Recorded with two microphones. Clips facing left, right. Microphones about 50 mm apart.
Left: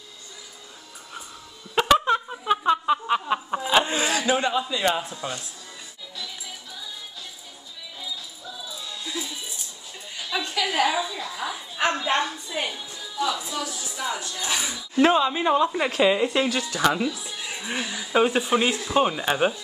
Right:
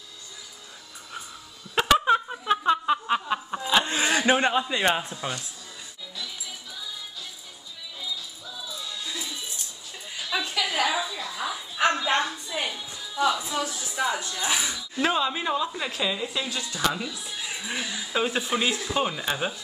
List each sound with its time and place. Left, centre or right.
1.8 s a sound: centre
3.4 s snicker: centre
4.1 s a man's voice: right
9.0 s music: centre
10.1 s a sound: centre
11.1 s a sound: centre
13.1 s speech: right
14.5 s speech: centre
15.1 s speech: centre
15.5 s a woman's voice: left
15.9 s a woman's voice: left
16.8 s a woman's voice: left
17.6 s speech: centre
18.1 s speech: left